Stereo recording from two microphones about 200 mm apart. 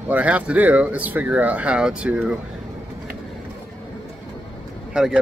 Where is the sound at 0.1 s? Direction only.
5° right (ahead or behind).